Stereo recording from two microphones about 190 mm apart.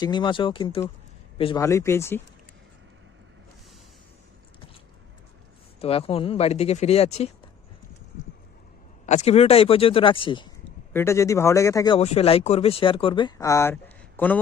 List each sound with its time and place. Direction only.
0.0 s speech: 25° left (ahead or behind)
1.5 s speech: 15° left (ahead or behind)
5.8 s speech: 30° left (ahead or behind)
9.0 s speech: 35° left (ahead or behind)
10.9 s speech: 15° left (ahead or behind)
11.9 s speech: 30° left (ahead or behind); by 14.3 s 10° left (ahead or behind)